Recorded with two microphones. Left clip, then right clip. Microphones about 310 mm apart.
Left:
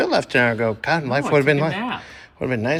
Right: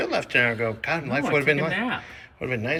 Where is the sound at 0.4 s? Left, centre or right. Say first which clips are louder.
Left 4 dB; left.